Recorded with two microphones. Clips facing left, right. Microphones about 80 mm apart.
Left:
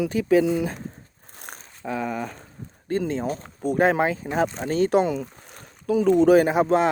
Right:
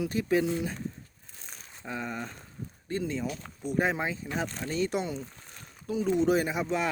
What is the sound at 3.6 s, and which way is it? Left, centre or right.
Speech, left.